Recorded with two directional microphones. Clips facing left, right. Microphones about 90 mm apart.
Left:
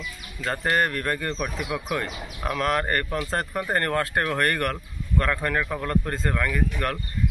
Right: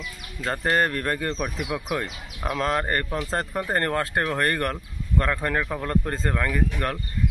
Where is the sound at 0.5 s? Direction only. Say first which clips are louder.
Right 1 dB; 30° right (ahead or behind).